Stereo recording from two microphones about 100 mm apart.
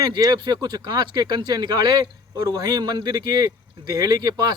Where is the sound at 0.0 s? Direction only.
45° right (ahead or behind).